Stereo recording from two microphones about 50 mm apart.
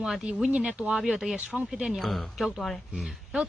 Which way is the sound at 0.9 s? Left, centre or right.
Centre.